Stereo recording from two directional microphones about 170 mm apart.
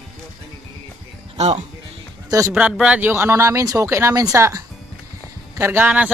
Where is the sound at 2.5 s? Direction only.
5° right (ahead or behind).